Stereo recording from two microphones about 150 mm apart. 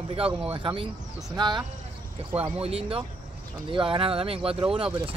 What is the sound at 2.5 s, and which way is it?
Speech, 40° right (ahead or behind).